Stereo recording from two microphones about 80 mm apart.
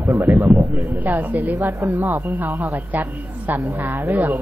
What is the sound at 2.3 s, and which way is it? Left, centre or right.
A man's voice, right.